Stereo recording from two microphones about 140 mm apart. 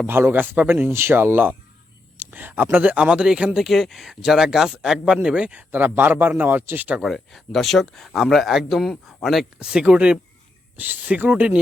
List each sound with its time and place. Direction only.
0.0 s speech: 15° right (ahead or behind)
7.0 s speech: centre (ahead or behind)